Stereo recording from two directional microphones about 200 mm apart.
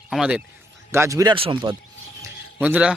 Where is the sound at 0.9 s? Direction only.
15° right (ahead or behind).